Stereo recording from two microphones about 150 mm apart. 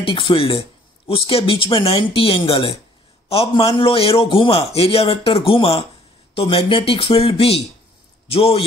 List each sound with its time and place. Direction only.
0.0 s speech: 35° left (ahead or behind)